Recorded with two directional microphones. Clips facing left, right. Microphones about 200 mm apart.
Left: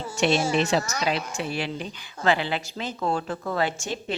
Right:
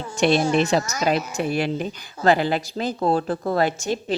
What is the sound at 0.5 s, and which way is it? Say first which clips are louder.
A woman's voice: right 3 dB; 55° right (ahead or behind).